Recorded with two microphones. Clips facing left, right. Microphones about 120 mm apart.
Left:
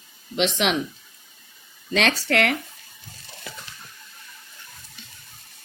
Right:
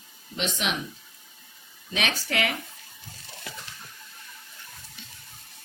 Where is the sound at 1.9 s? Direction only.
70° left (ahead or behind).